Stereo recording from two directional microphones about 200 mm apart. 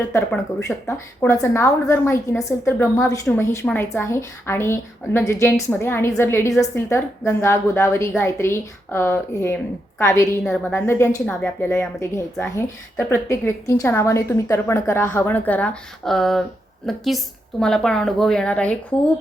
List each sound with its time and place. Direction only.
0.0 s a woman's voice: 10° left (ahead or behind)